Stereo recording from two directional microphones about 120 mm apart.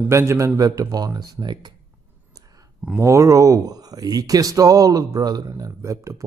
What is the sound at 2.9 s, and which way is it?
Speech, 25° right (ahead or behind).